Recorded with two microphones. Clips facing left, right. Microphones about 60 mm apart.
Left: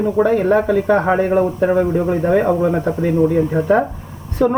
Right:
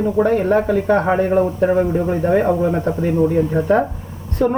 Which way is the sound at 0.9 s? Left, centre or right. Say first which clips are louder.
Even; centre.